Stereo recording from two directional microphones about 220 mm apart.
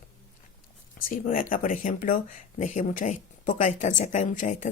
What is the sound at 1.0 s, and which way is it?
Speech, 40° left (ahead or behind).